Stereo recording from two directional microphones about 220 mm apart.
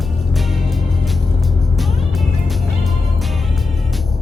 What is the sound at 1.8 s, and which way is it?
Music, centre (ahead or behind).